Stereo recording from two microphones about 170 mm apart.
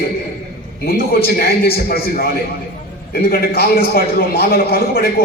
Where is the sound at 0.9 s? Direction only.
65° left (ahead or behind).